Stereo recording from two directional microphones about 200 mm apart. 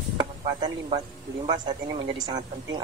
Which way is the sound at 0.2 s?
20° right (ahead or behind).